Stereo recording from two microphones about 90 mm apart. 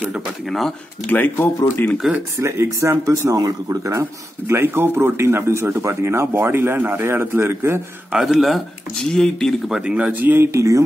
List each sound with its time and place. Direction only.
0.5 s speech: centre (ahead or behind)
1.0 s speech: 20° left (ahead or behind)
2.3 s speech: 30° right (ahead or behind)
8.1 s speech: centre (ahead or behind)
9.8 s speech: 15° right (ahead or behind); by 10.8 s 35° right (ahead or behind)